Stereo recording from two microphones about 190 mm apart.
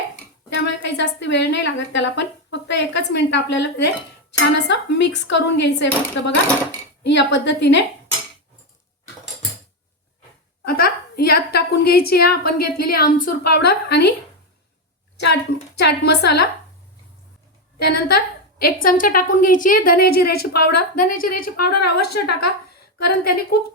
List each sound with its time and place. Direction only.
0.5 s a woman's voice: 70° left (ahead or behind)
10.7 s a woman's voice: 55° left (ahead or behind)
15.8 s a woman's voice: 60° left (ahead or behind)
17.7 s a woman's voice: 55° left (ahead or behind)